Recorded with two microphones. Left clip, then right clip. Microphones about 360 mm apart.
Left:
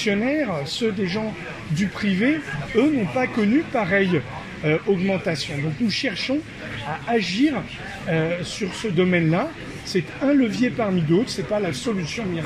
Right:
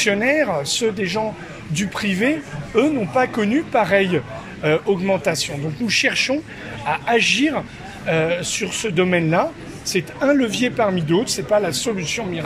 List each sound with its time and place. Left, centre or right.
0.0 s speech: right